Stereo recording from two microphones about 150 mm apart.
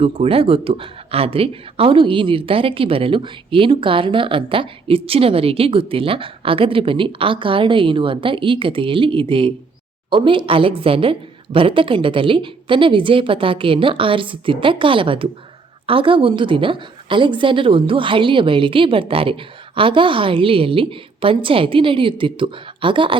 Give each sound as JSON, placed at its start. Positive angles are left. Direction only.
{"t": 0.0, "sound": "speech", "side_deg": -40}